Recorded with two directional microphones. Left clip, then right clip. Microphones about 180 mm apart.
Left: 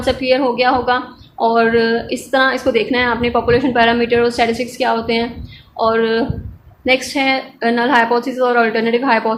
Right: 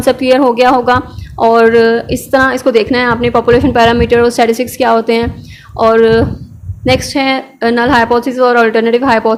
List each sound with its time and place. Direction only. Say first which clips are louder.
0.0 s a woman's voice: right 6 dB; 45° right (ahead or behind)